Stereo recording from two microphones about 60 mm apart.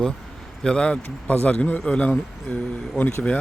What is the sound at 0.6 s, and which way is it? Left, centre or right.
A man's voice, centre.